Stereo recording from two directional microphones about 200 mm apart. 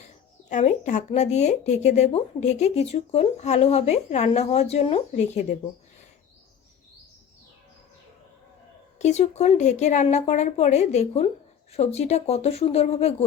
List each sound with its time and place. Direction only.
0.5 s speech: 40° left (ahead or behind)
9.0 s speech: 35° left (ahead or behind)